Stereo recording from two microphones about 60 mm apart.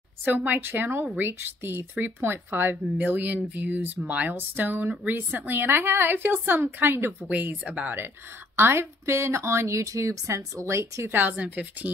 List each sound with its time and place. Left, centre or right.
0.2 s a woman's voice: right
7.2 s a woman's voice: right
8.5 s a woman's voice: right
11.1 s a woman's voice: right